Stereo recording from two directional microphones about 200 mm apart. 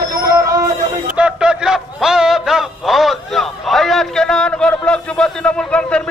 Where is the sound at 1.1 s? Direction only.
5° right (ahead or behind).